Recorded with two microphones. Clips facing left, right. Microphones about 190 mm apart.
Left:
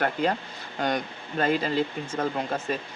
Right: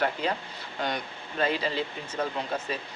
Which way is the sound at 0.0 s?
50° left (ahead or behind).